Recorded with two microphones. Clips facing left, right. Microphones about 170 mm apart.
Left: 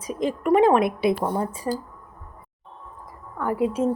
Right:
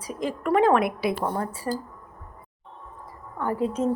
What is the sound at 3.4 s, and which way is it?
Speech, 10° left (ahead or behind).